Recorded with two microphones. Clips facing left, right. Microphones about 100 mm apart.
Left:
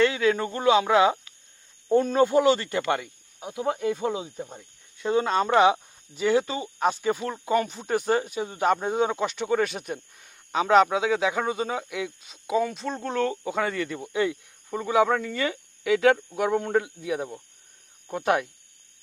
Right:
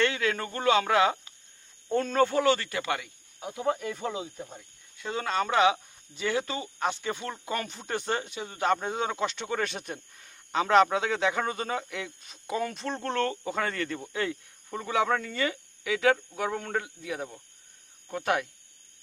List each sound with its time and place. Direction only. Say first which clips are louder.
0.0 s speech: left 5 dB; 15° left (ahead or behind)
9.2 s speech: left 5 dB; 5° left (ahead or behind); by 18.4 s 20° left (ahead or behind)